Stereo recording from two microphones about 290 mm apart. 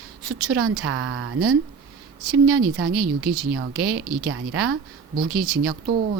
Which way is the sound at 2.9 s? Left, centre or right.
Right.